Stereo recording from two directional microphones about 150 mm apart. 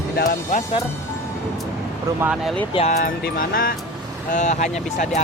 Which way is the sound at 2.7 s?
45° left (ahead or behind).